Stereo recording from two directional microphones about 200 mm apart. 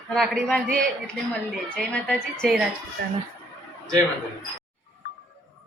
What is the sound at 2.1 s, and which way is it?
Speech, centre (ahead or behind).